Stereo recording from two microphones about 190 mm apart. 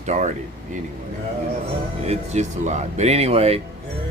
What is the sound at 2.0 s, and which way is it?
Speech, 35° right (ahead or behind).